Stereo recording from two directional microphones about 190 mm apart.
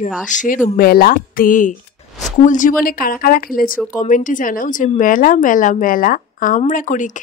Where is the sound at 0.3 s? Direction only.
40° left (ahead or behind).